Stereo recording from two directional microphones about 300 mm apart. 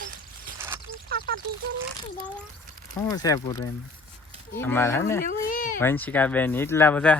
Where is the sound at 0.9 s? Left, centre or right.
Right.